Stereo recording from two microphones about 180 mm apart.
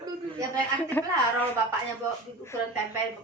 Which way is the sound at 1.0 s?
10° left (ahead or behind).